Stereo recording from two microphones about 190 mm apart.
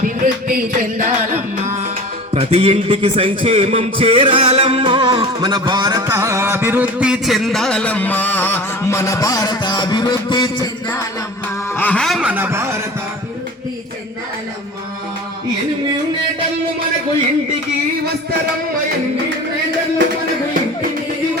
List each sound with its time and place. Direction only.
0.0 s music: 45° right (ahead or behind)
2.3 s a man's voice: 30° right (ahead or behind); by 11.0 s 20° left (ahead or behind)
11.7 s a sound: 10° left (ahead or behind); by 12.6 s 10° right (ahead or behind)